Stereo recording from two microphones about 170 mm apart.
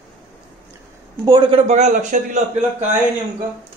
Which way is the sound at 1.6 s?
45° right (ahead or behind).